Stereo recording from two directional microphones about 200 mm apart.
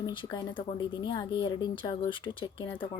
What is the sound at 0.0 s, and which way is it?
Speech, 20° left (ahead or behind).